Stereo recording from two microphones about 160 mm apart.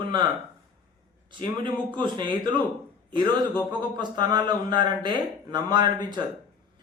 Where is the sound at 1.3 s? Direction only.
30° right (ahead or behind).